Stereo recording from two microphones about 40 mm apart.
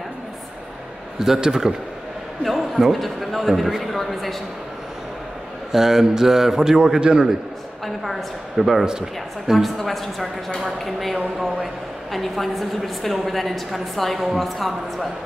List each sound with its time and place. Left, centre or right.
1.2 s a man's voice: centre
2.4 s a woman's voice: centre
5.7 s a man's voice: centre
7.8 s a woman's voice: centre
8.8 s a man's voice: centre
9.8 s a woman's voice: centre